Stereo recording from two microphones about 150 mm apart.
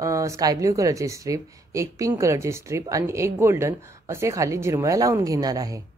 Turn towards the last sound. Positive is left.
turn(degrees=-25)  # may be behind; listen again after turning